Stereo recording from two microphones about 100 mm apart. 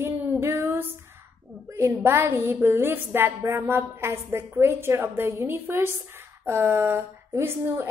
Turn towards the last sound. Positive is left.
turn(degrees=-25)  # may be behind; listen again after turning